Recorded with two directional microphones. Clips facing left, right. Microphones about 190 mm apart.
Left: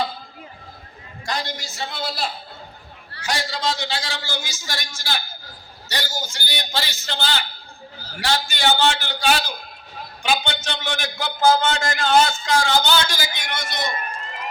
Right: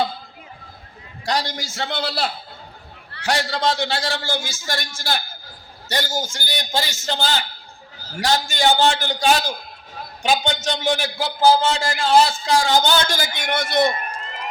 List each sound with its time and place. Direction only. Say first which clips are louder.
1.2 s a man's voice: right 4 dB; 70° right (ahead or behind)